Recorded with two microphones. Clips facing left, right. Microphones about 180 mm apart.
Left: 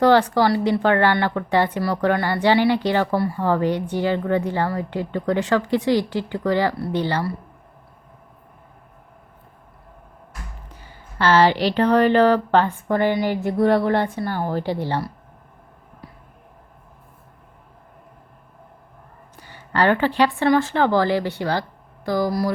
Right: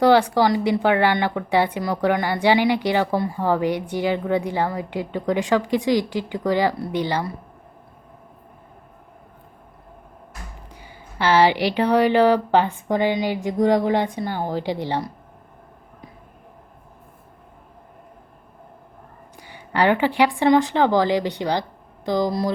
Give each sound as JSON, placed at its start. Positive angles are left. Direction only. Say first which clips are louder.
{"t": 0.0, "sound": "speech", "louder": "even", "side_deg": -10}
{"t": 10.7, "sound": "speech", "louder": "right 2 dB", "side_deg": -15}
{"t": 19.4, "sound": "speech", "louder": "even", "side_deg": -15}